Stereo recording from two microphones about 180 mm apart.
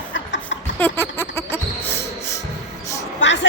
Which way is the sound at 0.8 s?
10° left (ahead or behind).